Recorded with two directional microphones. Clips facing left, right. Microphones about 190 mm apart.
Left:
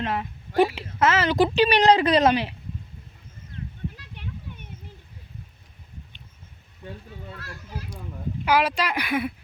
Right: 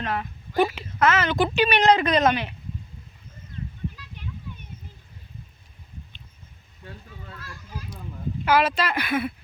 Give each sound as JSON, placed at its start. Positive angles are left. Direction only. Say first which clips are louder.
{"t": 0.0, "sound": "a woman's voice", "louder": "left 1 dB", "side_deg": 25}
{"t": 7.3, "sound": "a child's voice", "louder": "left 2 dB", "side_deg": 70}
{"t": 8.4, "sound": "speech", "louder": "right 1 dB", "side_deg": 10}